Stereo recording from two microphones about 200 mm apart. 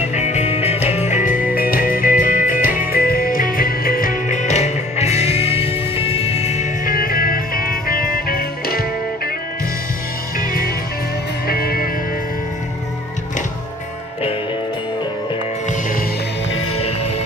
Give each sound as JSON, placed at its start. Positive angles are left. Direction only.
{"t": 0.1, "sound": "music", "side_deg": 35}
{"t": 11.4, "sound": "music", "side_deg": 50}